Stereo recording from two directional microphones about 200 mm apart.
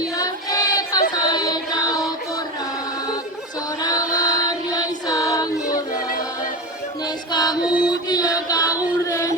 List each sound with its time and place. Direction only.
0.2 s child singing: 20° left (ahead or behind)
1.1 s music: 20° left (ahead or behind)
3.8 s music: 20° left (ahead or behind)
5.6 s music: 45° left (ahead or behind)
7.3 s music: 20° left (ahead or behind)
7.6 s music: 5° right (ahead or behind)
8.1 s music: 20° left (ahead or behind)
9.0 s a sound: 15° left (ahead or behind)